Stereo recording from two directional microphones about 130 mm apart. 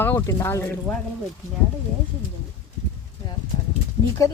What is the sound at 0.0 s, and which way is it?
Speech, 20° left (ahead or behind).